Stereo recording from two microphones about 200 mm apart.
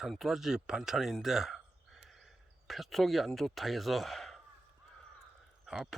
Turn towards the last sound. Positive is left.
turn(degrees=-5)  # may be behind; listen again after turning